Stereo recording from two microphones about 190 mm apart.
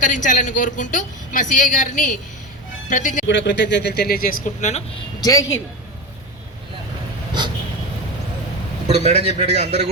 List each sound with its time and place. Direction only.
0.0 s a woman's voice: 40° left (ahead or behind)
3.2 s speech: 70° left (ahead or behind); by 4.8 s 40° left (ahead or behind)
5.2 s speech: 15° left (ahead or behind)
7.4 s a sound: 25° right (ahead or behind)
8.9 s a man's voice: 35° right (ahead or behind)